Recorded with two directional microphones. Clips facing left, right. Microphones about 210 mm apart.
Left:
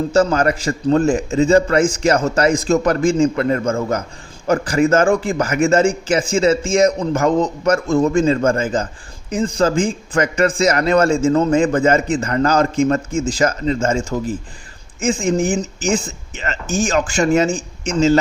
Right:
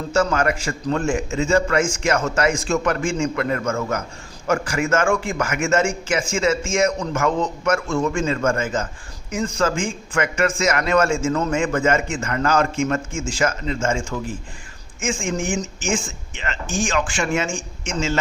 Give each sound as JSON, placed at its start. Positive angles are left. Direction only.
{"t": 0.1, "sound": "a man's voice", "side_deg": 35}